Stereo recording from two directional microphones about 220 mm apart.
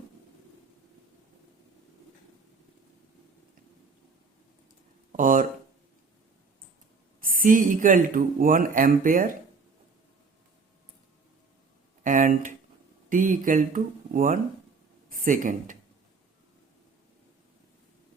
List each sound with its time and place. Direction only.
5.1 s speech: 35° right (ahead or behind)
7.2 s speech: 40° right (ahead or behind)
12.0 s a sound: 35° right (ahead or behind)
13.1 s speech: 35° right (ahead or behind)